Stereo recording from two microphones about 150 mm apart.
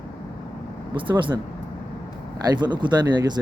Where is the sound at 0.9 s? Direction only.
35° right (ahead or behind).